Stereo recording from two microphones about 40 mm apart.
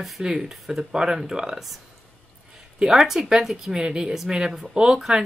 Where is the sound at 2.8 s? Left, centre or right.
Centre.